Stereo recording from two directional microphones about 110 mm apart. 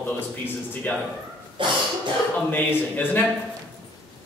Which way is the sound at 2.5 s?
15° left (ahead or behind).